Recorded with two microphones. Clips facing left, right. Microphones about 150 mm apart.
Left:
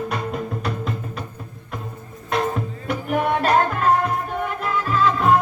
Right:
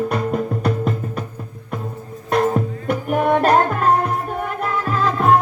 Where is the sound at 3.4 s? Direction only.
45° right (ahead or behind).